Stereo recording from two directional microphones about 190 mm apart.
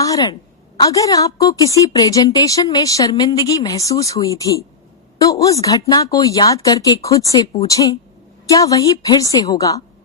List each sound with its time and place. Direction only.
0.0 s a woman's voice: 20° left (ahead or behind)